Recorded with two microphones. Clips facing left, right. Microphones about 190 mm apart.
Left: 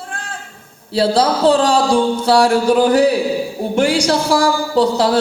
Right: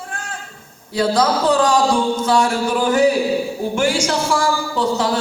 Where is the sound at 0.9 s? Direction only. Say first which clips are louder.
Left 2 dB; 30° left (ahead or behind).